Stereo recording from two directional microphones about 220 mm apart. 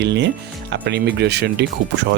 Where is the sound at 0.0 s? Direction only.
50° right (ahead or behind).